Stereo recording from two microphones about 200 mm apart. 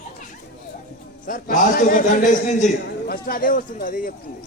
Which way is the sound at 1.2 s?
40° left (ahead or behind).